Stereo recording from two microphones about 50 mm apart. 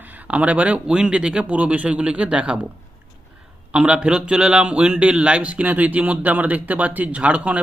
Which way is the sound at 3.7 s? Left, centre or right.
Right.